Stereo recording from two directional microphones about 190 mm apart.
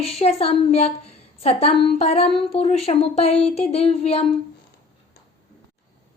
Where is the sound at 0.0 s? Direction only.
30° left (ahead or behind).